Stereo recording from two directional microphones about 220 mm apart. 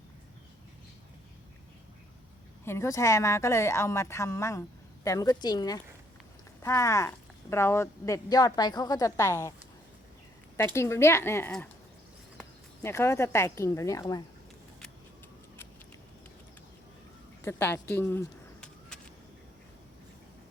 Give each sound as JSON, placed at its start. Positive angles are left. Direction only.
{"t": 2.6, "sound": "speech", "side_deg": 10}
{"t": 10.6, "sound": "speech", "side_deg": 10}
{"t": 17.4, "sound": "a sound", "side_deg": 10}